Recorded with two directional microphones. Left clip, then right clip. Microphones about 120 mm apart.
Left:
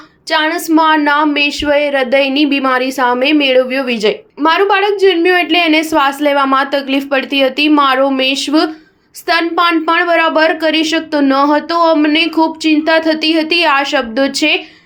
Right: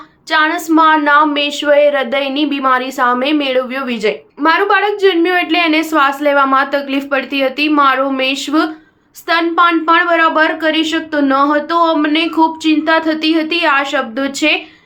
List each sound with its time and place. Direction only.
0.3 s a woman's voice: 20° left (ahead or behind)